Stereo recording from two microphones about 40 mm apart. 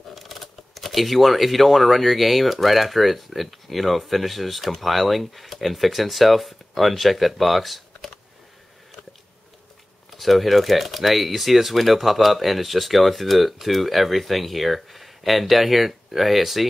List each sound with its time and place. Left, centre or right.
0.1 s speech: centre
10.1 s speech: centre